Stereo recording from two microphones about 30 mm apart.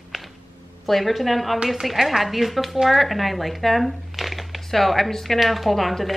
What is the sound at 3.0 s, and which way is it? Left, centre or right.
Speech, centre.